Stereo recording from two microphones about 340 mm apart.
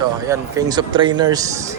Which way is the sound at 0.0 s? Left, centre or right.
Centre.